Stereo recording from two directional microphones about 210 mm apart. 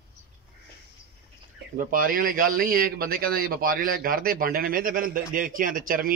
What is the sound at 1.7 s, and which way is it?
A man's voice, 40° right (ahead or behind).